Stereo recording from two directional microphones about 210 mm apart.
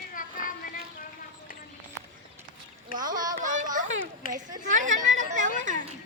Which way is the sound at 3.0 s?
20° right (ahead or behind).